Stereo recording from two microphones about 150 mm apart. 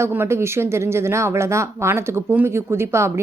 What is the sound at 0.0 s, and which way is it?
Speech, 15° right (ahead or behind).